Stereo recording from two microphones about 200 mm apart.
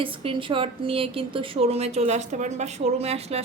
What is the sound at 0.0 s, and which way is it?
A woman's voice, 25° right (ahead or behind).